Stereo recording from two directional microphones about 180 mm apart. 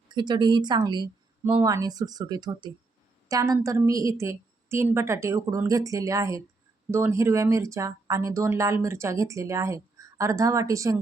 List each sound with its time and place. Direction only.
0.1 s speech: 25° right (ahead or behind)